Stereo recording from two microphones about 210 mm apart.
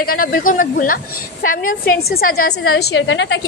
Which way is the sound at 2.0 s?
45° left (ahead or behind).